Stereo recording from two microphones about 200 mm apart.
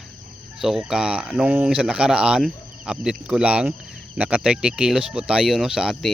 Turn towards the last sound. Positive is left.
turn(degrees=0)  # may be behind; listen again after turning